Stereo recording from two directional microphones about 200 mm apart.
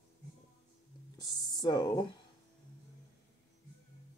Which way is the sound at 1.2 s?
20° left (ahead or behind).